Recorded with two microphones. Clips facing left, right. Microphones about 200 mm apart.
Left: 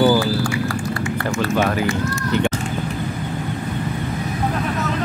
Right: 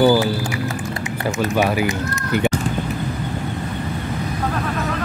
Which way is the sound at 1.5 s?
15° right (ahead or behind).